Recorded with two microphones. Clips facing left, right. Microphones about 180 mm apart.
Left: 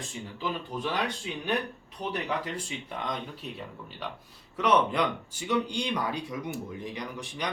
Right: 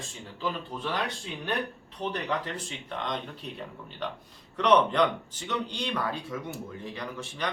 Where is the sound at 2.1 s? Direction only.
10° left (ahead or behind).